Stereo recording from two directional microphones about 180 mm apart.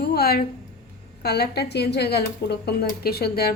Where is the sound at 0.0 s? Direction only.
60° left (ahead or behind).